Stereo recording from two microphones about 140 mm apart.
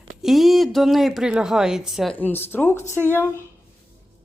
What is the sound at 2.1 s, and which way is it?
Speech, 15° left (ahead or behind).